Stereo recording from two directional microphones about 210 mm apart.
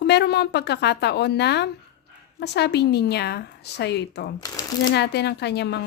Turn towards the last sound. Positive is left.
turn(degrees=55)  # may be behind; listen again after turning